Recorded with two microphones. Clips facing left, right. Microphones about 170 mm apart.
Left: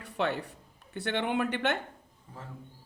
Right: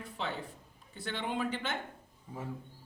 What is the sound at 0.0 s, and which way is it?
Speech, 70° left (ahead or behind).